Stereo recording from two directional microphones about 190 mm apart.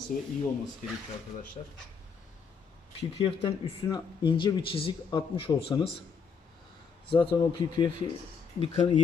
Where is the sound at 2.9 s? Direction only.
30° left (ahead or behind).